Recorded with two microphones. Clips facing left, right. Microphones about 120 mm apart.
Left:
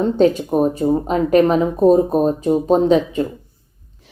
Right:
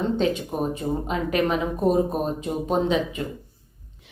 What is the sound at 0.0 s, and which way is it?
Speech, 40° left (ahead or behind).